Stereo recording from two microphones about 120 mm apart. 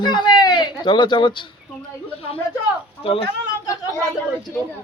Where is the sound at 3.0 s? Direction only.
50° left (ahead or behind).